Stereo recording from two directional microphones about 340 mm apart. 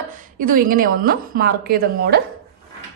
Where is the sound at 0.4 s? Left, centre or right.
Right.